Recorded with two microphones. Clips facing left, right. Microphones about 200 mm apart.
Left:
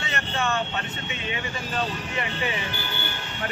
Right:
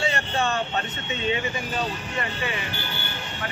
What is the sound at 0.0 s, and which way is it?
Vehicle, 30° right (ahead or behind).